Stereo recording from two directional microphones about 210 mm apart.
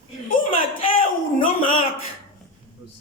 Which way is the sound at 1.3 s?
25° left (ahead or behind).